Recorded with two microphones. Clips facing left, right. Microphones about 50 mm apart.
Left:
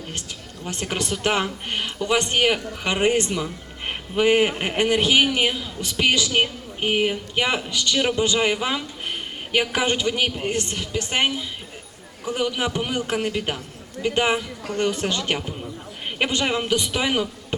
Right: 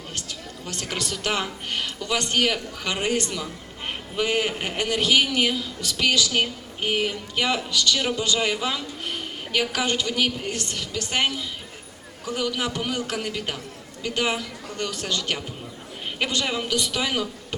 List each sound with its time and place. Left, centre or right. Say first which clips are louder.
0.1 s speech: left 1 dB; left